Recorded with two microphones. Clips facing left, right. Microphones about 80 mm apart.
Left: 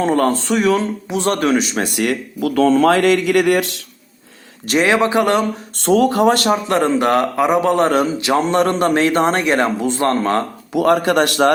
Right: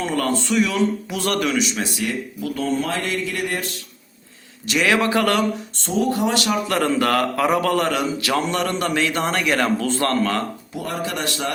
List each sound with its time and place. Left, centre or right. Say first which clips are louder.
0.0 s speech: left 6 dB; left
1.1 s speech: left 5 dB; left
2.0 s speech: left 6 dB; left
4.8 s a man's voice: left 4 dB; left
5.8 s speech: left 8 dB; left
6.3 s speech: left 5 dB; left
6.7 s a man's voice: left 4 dB; left
7.9 s a man's voice: left 6 dB; left
10.8 s speech: left 13 dB; left